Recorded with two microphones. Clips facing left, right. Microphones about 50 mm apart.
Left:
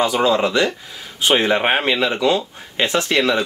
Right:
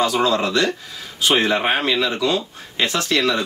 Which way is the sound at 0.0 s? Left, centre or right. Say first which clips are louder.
Left 2 dB; left.